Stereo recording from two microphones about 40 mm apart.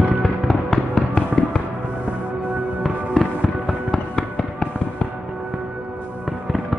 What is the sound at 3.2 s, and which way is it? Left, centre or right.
Music, centre.